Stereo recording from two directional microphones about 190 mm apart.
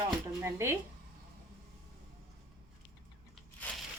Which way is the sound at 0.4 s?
15° right (ahead or behind).